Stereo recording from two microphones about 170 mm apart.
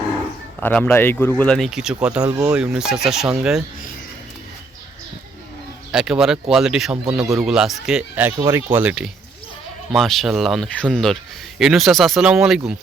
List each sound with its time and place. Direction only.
0.6 s speech: 10° left (ahead or behind)
5.9 s speech: 5° right (ahead or behind)